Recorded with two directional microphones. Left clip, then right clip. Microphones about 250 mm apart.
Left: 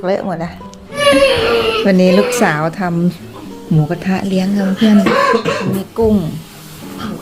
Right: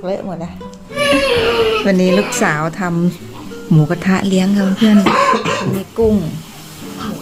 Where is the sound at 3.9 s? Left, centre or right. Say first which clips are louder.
Right 2 dB; centre.